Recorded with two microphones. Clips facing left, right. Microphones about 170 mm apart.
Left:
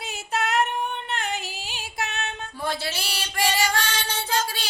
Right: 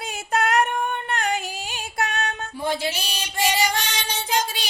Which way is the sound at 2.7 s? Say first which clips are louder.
Right 4 dB; 15° right (ahead or behind).